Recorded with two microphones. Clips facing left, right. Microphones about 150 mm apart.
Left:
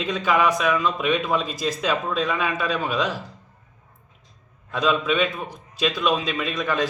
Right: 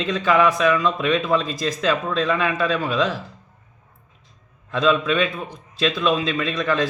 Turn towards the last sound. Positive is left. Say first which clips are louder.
# right 2 dB
turn(degrees=10)  # may be behind; listen again after turning